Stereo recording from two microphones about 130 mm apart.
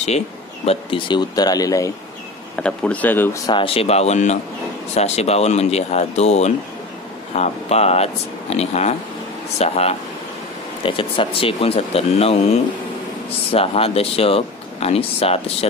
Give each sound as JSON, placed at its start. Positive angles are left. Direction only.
{"t": 0.7, "sound": "speech", "side_deg": 40}
{"t": 2.6, "sound": "a man's voice", "side_deg": 10}
{"t": 3.4, "sound": "speech", "side_deg": 45}
{"t": 10.8, "sound": "speech", "side_deg": 40}